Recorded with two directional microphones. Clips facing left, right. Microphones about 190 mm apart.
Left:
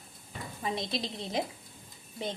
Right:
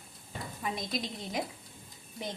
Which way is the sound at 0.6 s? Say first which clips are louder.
Left 2 dB; 25° left (ahead or behind).